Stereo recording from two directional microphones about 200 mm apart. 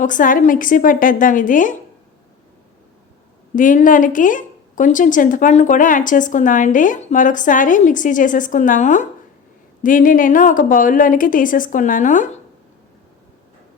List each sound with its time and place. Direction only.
0.0 s speech: 40° left (ahead or behind)
3.5 s speech: 40° left (ahead or behind)